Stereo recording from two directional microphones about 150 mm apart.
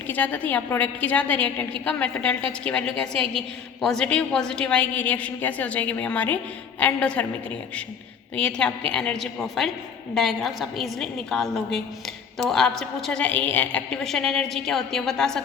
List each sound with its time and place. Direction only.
0.1 s a woman's voice: 10° left (ahead or behind)
8.4 s a woman's voice: 5° left (ahead or behind)